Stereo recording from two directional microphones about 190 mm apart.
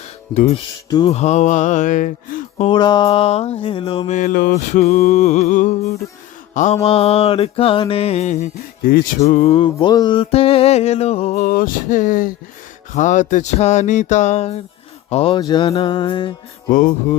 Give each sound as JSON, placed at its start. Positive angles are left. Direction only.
{"t": 0.3, "sound": "mantra", "side_deg": 35}
{"t": 0.9, "sound": "music", "side_deg": 20}
{"t": 1.1, "sound": "mantra", "side_deg": 35}
{"t": 2.6, "sound": "mantra", "side_deg": 25}
{"t": 6.8, "sound": "mantra", "side_deg": 30}
{"t": 9.2, "sound": "mantra", "side_deg": 35}
{"t": 15.4, "sound": "music", "side_deg": 25}
{"t": 16.7, "sound": "music", "side_deg": 45}